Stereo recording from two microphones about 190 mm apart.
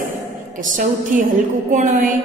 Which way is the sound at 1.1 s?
45° right (ahead or behind).